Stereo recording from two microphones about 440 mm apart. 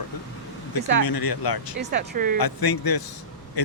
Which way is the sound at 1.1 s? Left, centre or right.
Left.